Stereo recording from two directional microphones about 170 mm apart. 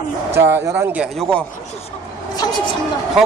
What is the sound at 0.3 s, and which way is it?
A man's voice, 15° right (ahead or behind).